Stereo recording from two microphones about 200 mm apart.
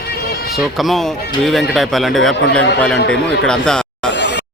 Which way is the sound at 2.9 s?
65° left (ahead or behind).